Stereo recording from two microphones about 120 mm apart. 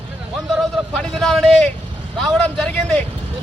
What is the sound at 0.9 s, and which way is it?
Speech, 5° left (ahead or behind).